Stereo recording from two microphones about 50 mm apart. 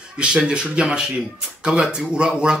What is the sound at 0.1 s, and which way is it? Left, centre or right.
Speech, centre.